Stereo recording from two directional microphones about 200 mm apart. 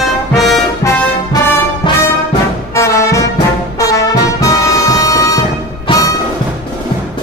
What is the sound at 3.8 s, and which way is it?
Brass instrument, 15° left (ahead or behind).